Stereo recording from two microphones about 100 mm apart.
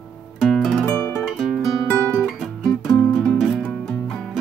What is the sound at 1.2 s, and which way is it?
Guitar, centre (ahead or behind).